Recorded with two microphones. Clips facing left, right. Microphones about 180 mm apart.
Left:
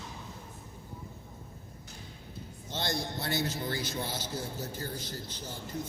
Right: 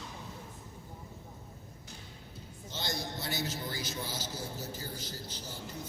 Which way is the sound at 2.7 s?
55° left (ahead or behind).